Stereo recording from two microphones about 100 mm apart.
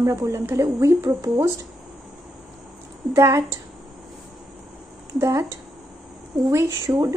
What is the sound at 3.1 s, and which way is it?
Speech, 30° right (ahead or behind).